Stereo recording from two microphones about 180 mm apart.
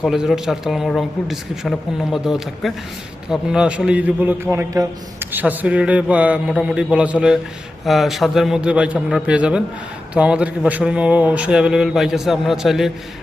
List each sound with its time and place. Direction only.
0.0 s a man's voice: centre (ahead or behind)